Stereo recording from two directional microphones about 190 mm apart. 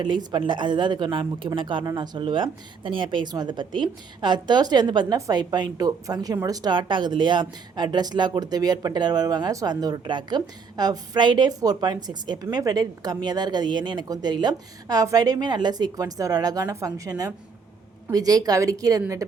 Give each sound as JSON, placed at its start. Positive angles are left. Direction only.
{"t": 0.0, "sound": "a woman's voice", "side_deg": -20}